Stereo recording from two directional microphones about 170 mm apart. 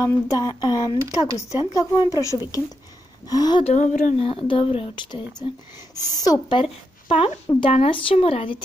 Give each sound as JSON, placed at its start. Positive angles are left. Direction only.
{"t": 0.0, "sound": "speech", "side_deg": 20}
{"t": 3.6, "sound": "speech", "side_deg": 45}
{"t": 4.2, "sound": "speech", "side_deg": 30}
{"t": 6.6, "sound": "a woman's voice", "side_deg": 35}